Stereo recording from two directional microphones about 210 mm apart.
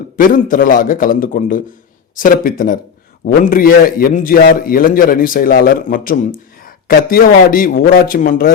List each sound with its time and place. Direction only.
0.2 s a man's voice: 40° left (ahead or behind)